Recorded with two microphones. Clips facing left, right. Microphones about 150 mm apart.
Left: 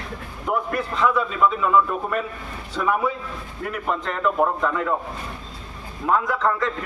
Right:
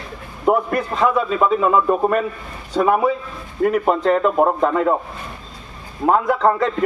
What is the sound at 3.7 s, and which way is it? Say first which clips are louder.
A man's voice: right 10 dB; 40° right (ahead or behind).